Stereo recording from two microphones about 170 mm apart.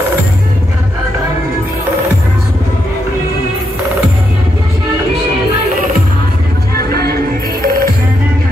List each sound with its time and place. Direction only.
7.6 s music: 60° right (ahead or behind)